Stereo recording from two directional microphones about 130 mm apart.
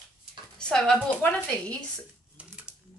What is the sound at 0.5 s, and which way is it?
A woman's voice, 5° left (ahead or behind).